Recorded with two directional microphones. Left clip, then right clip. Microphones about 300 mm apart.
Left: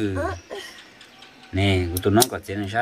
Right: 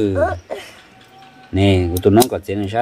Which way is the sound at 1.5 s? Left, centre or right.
Right.